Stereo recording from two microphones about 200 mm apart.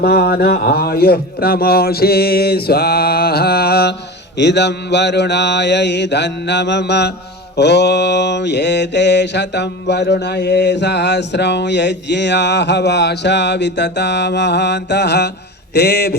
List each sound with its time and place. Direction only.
0.0 s speech: 50° left (ahead or behind)
4.4 s mantra: 60° left (ahead or behind)
15.7 s speech: 55° left (ahead or behind)